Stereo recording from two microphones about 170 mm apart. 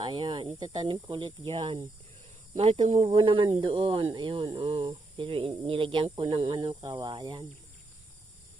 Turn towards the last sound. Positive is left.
turn(degrees=-25)  # may be behind; listen again after turning